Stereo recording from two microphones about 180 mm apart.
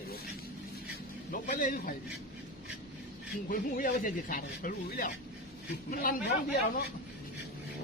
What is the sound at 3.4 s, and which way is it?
Speech, 50° left (ahead or behind).